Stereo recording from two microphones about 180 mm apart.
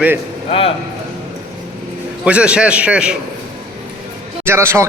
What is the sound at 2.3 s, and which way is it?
Speech, 5° right (ahead or behind).